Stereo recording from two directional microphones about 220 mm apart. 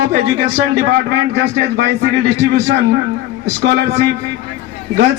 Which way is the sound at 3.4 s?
50° right (ahead or behind).